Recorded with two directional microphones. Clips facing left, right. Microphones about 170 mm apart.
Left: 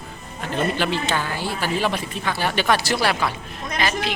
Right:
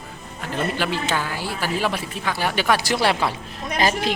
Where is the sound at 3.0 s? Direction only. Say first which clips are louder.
Right 1 dB; 25° right (ahead or behind).